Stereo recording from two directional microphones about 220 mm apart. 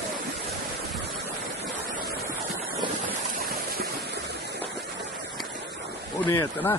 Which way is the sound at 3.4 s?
45° right (ahead or behind).